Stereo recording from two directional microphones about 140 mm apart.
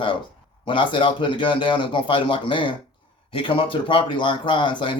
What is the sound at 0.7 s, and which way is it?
A man's voice, 35° left (ahead or behind).